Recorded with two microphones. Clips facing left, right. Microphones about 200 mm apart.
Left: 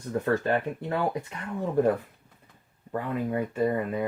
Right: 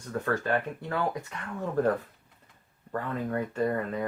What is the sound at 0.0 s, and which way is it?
Speech, 25° left (ahead or behind).